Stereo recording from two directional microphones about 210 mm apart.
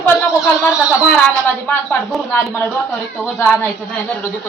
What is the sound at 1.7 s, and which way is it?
A woman's voice, 5° left (ahead or behind).